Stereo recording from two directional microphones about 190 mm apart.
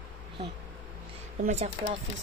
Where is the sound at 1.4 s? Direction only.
35° right (ahead or behind).